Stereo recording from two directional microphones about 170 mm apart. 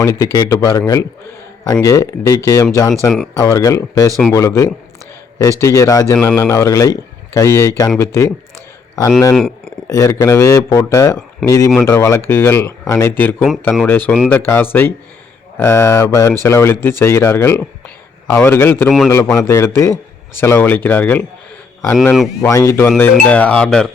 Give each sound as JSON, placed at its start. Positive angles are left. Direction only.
{"t": 0.0, "sound": "a man's voice", "side_deg": 20}
{"t": 9.3, "sound": "a sound", "side_deg": 0}
{"t": 9.8, "sound": "a man's voice", "side_deg": 15}
{"t": 22.4, "sound": "a man's voice", "side_deg": 20}